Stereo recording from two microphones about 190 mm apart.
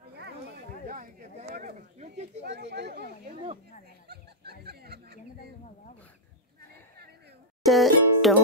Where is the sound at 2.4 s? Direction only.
65° right (ahead or behind).